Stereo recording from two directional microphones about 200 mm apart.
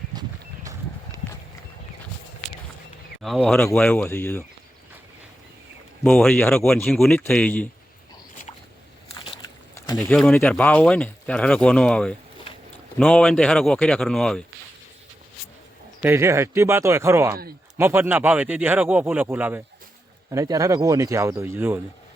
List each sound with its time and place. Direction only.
0.1 s a sound: 20° right (ahead or behind)
3.2 s speech: centre (ahead or behind)
6.0 s speech: 5° left (ahead or behind)
9.1 s biting: 25° left (ahead or behind)
10.0 s speech: 5° left (ahead or behind)
16.0 s speech: 10° right (ahead or behind)